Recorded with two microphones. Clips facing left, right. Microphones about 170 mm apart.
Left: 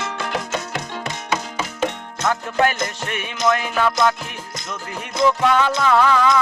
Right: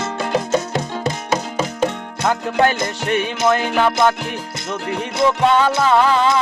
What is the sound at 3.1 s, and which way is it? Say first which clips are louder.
Music: right 4 dB; 30° right (ahead or behind).